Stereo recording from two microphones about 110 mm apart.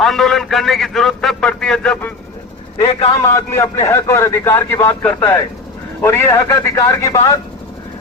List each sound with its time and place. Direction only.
0.0 s a man's voice: 5° left (ahead or behind)
3.2 s a man's voice: 25° left (ahead or behind)